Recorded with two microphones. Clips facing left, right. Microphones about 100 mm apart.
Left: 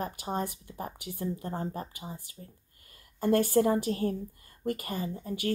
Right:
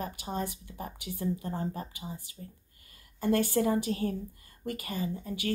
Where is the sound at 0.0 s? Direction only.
45° left (ahead or behind).